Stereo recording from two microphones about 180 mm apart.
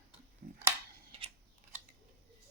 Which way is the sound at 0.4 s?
55° right (ahead or behind).